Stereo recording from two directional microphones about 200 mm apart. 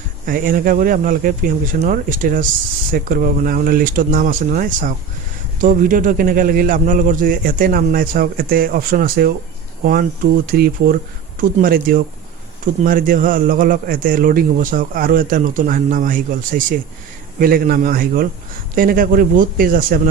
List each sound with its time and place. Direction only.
0.3 s a man's voice: 45° right (ahead or behind)